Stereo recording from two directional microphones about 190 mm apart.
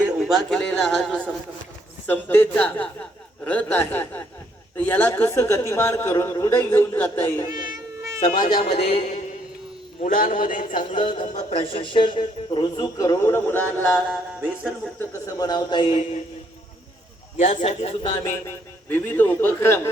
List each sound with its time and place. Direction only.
0.2 s a man's voice: centre (ahead or behind)
7.4 s cat: 20° right (ahead or behind)
8.6 s a man's voice: 30° left (ahead or behind)
10.9 s a man's voice: 25° left (ahead or behind)
11.3 s a man's voice: 35° left (ahead or behind); by 14.0 s 10° left (ahead or behind)
14.1 s speech: centre (ahead or behind)
14.9 s a man's voice: 20° left (ahead or behind)
17.3 s a man's voice: 35° left (ahead or behind)
18.9 s a woman's voice: 10° left (ahead or behind)